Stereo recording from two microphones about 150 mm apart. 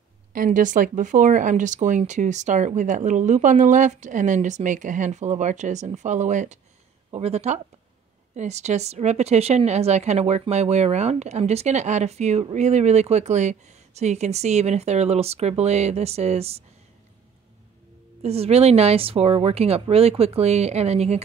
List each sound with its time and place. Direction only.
0.3 s a woman's voice: 65° right (ahead or behind); by 16.6 s 45° right (ahead or behind)
18.2 s a woman's voice: 45° right (ahead or behind)